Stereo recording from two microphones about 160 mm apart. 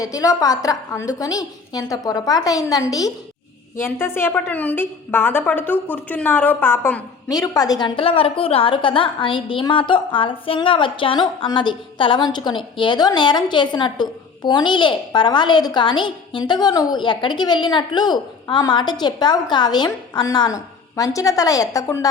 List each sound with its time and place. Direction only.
0.0 s a woman's voice: 20° left (ahead or behind)